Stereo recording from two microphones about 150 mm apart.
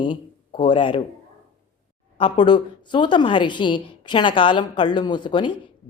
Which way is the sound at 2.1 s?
30° left (ahead or behind).